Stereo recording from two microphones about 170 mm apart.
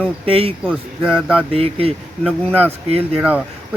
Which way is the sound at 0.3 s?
35° right (ahead or behind).